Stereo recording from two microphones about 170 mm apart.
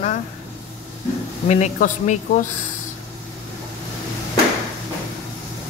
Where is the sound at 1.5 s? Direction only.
45° left (ahead or behind).